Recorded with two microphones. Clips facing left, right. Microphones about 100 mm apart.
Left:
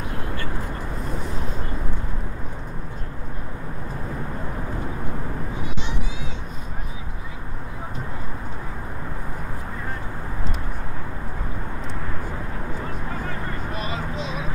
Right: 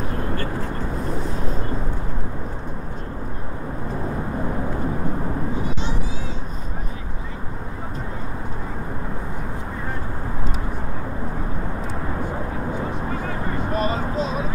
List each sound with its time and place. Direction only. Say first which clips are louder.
13.7 s vehicle: right 8 dB; 40° right (ahead or behind)